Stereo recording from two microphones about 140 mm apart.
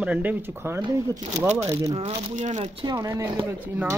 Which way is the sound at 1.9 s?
45° right (ahead or behind).